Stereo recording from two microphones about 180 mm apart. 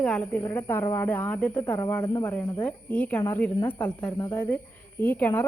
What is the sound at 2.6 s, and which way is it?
Speech, 10° left (ahead or behind).